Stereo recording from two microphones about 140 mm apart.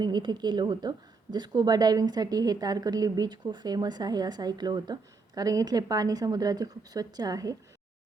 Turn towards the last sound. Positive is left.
turn(degrees=-25)  # may be behind; listen again after turning